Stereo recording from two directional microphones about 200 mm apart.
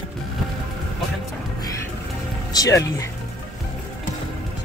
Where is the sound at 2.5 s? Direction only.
15° left (ahead or behind).